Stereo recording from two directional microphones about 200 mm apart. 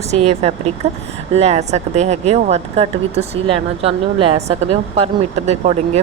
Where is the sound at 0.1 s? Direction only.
30° right (ahead or behind).